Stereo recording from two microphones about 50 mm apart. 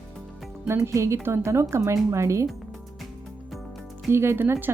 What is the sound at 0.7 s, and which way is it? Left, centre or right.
Speech, right.